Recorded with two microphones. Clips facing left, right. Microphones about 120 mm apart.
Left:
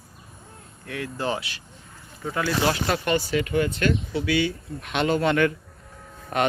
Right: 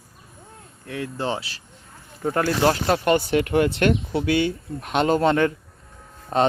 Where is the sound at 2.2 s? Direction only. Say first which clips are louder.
Right 4 dB; 50° right (ahead or behind).